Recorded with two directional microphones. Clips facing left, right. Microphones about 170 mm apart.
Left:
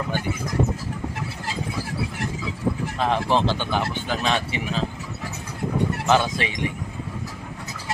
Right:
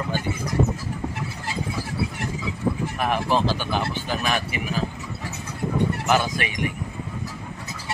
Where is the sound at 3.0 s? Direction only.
20° left (ahead or behind).